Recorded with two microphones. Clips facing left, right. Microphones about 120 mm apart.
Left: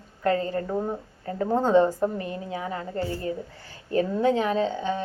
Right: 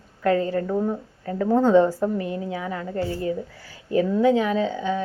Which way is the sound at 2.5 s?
35° left (ahead or behind).